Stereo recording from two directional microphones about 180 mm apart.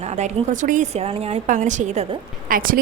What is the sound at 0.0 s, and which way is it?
A woman's voice, 40° right (ahead or behind).